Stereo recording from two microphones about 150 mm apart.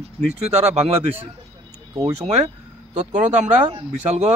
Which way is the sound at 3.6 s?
45° right (ahead or behind).